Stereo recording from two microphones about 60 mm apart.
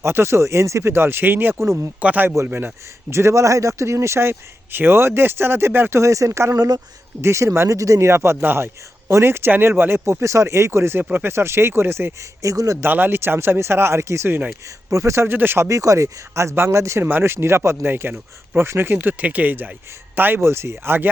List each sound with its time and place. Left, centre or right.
0.0 s a man's voice: right
2.0 s speech: right
3.1 s a man's voice: right
6.0 s speech: right
6.5 s speech: right
7.2 s a man's voice: right
12.4 s speech: right
12.8 s a man's voice: right
15.7 s speech: right
17.0 s speech: right
20.4 s a man's voice: right